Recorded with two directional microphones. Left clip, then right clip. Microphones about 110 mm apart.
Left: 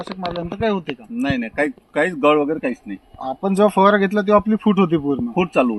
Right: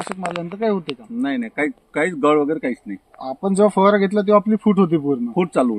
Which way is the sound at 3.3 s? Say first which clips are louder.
Even; 25° right (ahead or behind).